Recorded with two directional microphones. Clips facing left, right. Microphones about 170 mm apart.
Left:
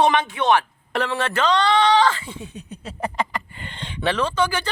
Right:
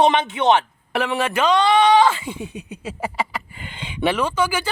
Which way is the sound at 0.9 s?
10° right (ahead or behind).